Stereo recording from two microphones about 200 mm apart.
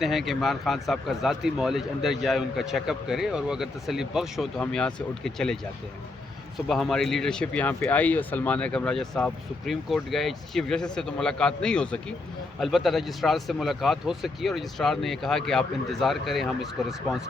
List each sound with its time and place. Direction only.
0.0 s speech: centre (ahead or behind)
6.7 s speech: centre (ahead or behind)